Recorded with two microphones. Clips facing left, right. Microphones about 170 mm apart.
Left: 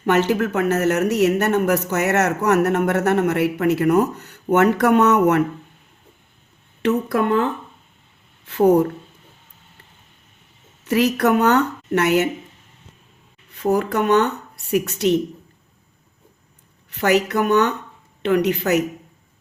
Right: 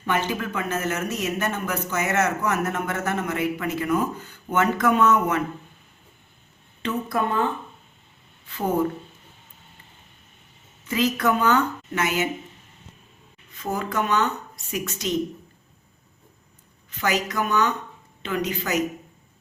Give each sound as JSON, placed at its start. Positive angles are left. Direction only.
{"t": 0.0, "sound": "speech", "side_deg": 75}
{"t": 6.8, "sound": "speech", "side_deg": 70}
{"t": 8.4, "sound": "speech", "side_deg": 75}
{"t": 10.8, "sound": "speech", "side_deg": 70}
{"t": 13.5, "sound": "speech", "side_deg": 65}
{"t": 16.9, "sound": "speech", "side_deg": 65}